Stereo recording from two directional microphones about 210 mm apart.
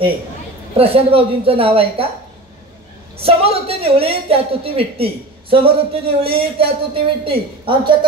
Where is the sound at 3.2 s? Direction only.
25° right (ahead or behind).